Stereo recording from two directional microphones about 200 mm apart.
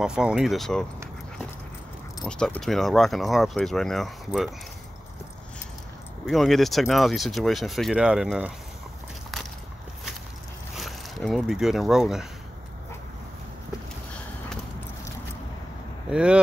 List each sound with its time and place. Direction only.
0.0 s speech: 5° right (ahead or behind)
2.2 s speech: 5° left (ahead or behind)
6.2 s speech: centre (ahead or behind)
10.8 s speech: centre (ahead or behind)
16.1 s speech: 5° right (ahead or behind)